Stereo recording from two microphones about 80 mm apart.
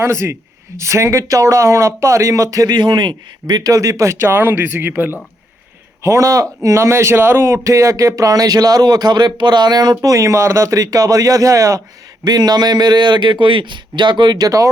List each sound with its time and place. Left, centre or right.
0.0 s speech: right
2.7 s speech: right
6.0 s speech: right
12.2 s a man's voice: right